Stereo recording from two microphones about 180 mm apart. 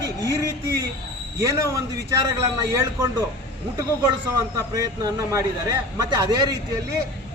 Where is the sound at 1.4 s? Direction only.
15° right (ahead or behind).